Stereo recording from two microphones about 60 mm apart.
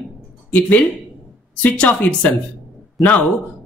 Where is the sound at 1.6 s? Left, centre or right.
Left.